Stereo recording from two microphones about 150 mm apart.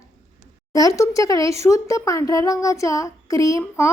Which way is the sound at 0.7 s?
25° left (ahead or behind).